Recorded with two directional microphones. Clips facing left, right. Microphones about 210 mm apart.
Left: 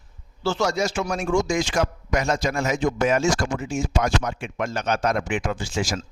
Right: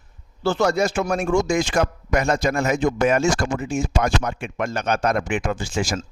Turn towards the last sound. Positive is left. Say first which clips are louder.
# right 2 dB
turn(degrees=-50)  # may be behind; listen again after turning